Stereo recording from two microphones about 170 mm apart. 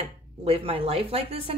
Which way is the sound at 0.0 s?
35° right (ahead or behind).